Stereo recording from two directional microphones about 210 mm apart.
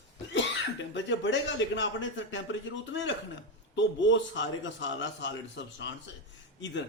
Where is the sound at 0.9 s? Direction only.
60° left (ahead or behind).